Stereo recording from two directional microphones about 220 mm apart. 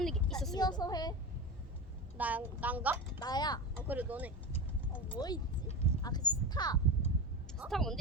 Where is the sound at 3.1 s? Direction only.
20° left (ahead or behind).